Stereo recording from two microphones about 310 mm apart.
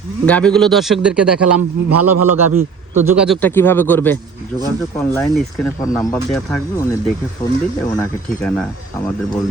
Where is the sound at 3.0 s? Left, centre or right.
Centre.